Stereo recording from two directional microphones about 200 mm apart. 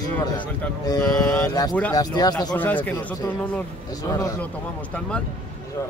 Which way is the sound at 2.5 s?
10° left (ahead or behind).